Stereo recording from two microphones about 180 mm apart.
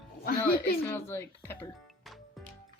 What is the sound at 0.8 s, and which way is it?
Speech, 15° left (ahead or behind).